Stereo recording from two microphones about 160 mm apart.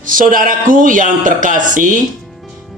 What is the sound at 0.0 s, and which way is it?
A man's voice, 60° right (ahead or behind).